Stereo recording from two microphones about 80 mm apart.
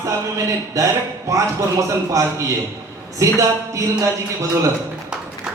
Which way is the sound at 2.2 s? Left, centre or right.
Right.